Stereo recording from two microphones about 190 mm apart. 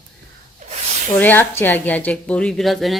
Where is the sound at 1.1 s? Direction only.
10° left (ahead or behind).